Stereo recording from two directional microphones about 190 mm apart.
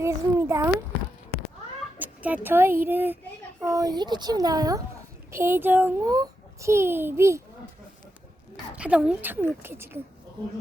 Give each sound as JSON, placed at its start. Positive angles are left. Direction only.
{"t": 0.0, "sound": "a sound", "side_deg": -15}
{"t": 2.0, "sound": "a child's voice", "side_deg": -10}
{"t": 8.7, "sound": "a child's voice", "side_deg": -5}